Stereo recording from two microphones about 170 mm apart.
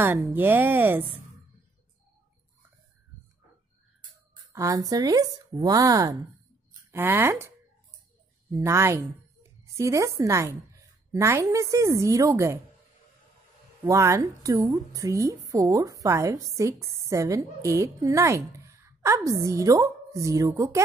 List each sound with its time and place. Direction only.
0.0 s a woman's voice: 10° right (ahead or behind)
4.5 s a woman's voice: 20° right (ahead or behind)
13.8 s a woman's voice: 20° right (ahead or behind)